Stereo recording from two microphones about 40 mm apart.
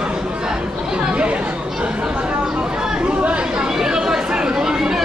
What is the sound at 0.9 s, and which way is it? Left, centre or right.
Chatter, right.